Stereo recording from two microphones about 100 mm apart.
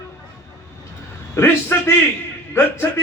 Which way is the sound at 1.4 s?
20° left (ahead or behind).